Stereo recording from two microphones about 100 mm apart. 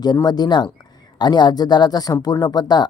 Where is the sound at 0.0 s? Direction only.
45° left (ahead or behind).